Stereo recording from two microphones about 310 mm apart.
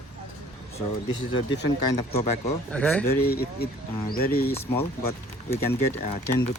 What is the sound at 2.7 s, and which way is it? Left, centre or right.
Speech, centre.